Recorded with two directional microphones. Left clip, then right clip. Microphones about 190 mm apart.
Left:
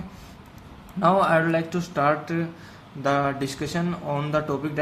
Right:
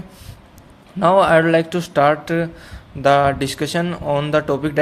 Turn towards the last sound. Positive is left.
turn(degrees=-55)  # may be behind; listen again after turning